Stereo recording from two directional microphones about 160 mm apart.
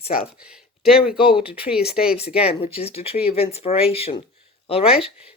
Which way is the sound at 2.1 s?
40° left (ahead or behind).